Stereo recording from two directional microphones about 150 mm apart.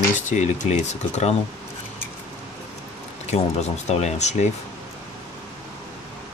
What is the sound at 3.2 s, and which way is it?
Speech, 50° left (ahead or behind).